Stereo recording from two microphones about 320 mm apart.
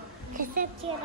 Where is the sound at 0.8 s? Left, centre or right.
Centre.